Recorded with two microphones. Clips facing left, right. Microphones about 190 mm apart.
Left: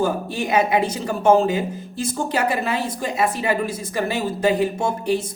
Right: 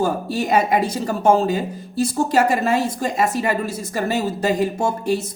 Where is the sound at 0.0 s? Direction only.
45° right (ahead or behind).